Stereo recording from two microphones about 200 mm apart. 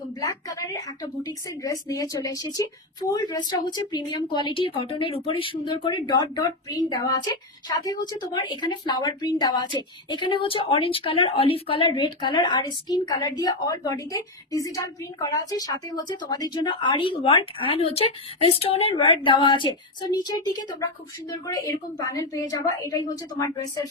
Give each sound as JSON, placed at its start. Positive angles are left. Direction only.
{"t": 0.2, "sound": "a woman's voice", "side_deg": 15}